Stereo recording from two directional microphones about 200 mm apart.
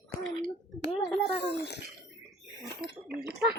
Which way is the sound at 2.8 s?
50° right (ahead or behind).